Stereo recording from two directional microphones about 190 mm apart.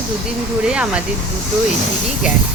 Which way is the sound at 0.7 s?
5° right (ahead or behind).